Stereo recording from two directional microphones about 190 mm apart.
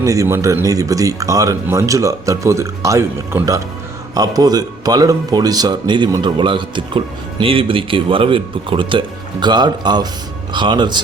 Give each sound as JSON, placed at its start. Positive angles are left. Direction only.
{"t": 0.0, "sound": "speech", "side_deg": -15}